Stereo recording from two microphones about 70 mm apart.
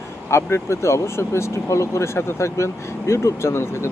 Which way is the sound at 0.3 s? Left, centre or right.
Left.